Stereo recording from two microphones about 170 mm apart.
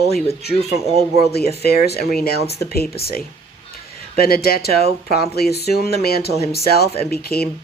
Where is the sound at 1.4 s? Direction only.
65° left (ahead or behind).